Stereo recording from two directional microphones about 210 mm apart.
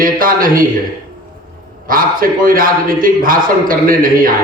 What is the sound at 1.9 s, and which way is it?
A man's voice, 40° right (ahead or behind).